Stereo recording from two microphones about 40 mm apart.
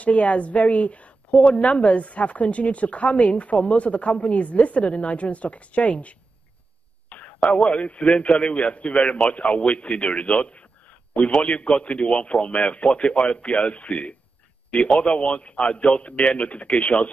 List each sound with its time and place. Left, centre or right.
0.0 s a woman's voice: left